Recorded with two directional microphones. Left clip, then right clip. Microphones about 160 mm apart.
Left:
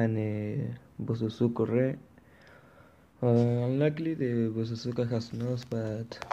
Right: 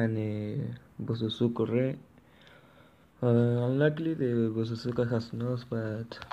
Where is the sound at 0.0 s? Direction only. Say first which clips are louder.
Left 1 dB; 10° left (ahead or behind).